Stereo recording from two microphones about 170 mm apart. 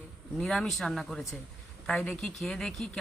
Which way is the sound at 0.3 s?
5° left (ahead or behind).